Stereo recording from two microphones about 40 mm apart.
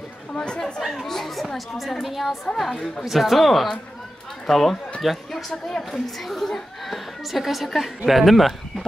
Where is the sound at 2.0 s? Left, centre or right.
Centre.